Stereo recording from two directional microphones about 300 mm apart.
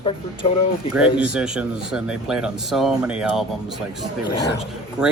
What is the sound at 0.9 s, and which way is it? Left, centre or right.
A man's voice, centre.